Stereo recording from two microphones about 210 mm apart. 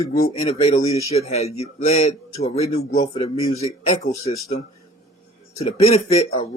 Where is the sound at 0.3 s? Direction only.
30° left (ahead or behind).